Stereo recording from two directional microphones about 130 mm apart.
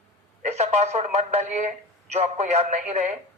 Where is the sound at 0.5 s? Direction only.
60° right (ahead or behind).